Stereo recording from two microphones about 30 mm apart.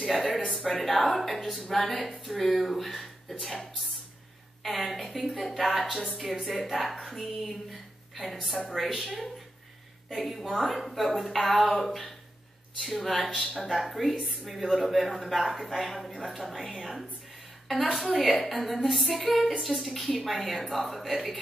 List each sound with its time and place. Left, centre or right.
0.0 s a sound: centre
0.5 s speech: centre
4.6 s a woman's voice: centre